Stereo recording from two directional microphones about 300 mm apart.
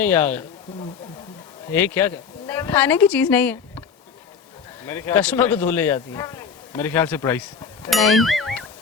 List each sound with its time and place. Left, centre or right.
0.0 s speech: centre
1.7 s speech: centre
4.9 s speech: centre